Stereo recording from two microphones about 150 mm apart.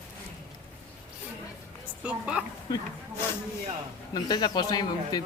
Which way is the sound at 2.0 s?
10° right (ahead or behind).